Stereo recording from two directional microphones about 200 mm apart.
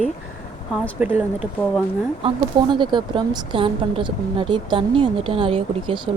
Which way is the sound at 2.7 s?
25° right (ahead or behind).